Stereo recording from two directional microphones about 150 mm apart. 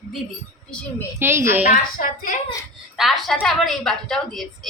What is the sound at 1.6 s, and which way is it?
Speech, 60° left (ahead or behind).